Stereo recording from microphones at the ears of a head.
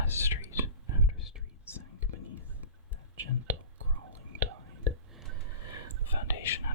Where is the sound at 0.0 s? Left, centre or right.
Left.